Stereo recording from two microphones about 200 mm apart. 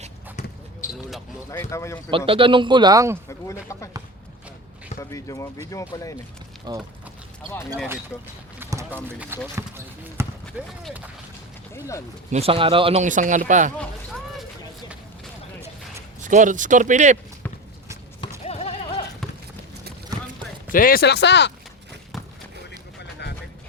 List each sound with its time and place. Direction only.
0.8 s basketball bounce: 40° left (ahead or behind)
1.5 s speech: 15° left (ahead or behind)
2.0 s a man's voice: 25° right (ahead or behind)
3.2 s speech: 15° left (ahead or behind)
4.9 s speech: 15° left (ahead or behind)
6.7 s a man's voice: 20° right (ahead or behind)
8.5 s clip-clop: 10° right (ahead or behind)
9.6 s basketball bounce: 15° right (ahead or behind)
11.7 s speech: 15° left (ahead or behind)
12.3 s speech: 30° right (ahead or behind)
16.2 s speech: 40° right (ahead or behind)
18.4 s sheep: 30° left (ahead or behind)
20.7 s speech: 45° left (ahead or behind)
22.1 s a sound: centre (ahead or behind)